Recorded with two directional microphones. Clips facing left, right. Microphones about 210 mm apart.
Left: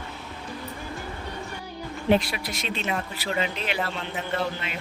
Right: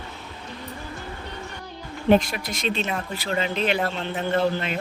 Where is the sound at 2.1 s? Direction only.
45° right (ahead or behind).